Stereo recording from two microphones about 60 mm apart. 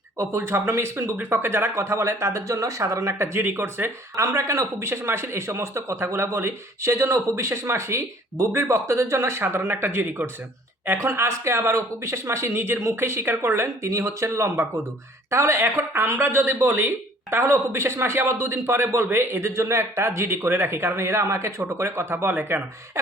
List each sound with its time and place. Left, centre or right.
0.2 s speech: right
3.4 s speech: right
4.1 s speech: right
4.9 s speech: right